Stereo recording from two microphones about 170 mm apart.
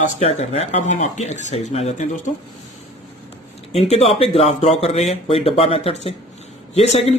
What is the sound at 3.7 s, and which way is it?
Speech, 35° left (ahead or behind).